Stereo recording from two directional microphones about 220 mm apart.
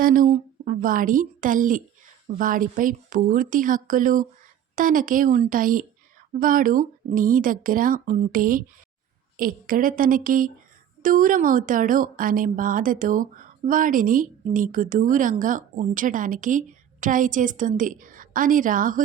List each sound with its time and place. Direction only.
0.0 s speech: 40° right (ahead or behind)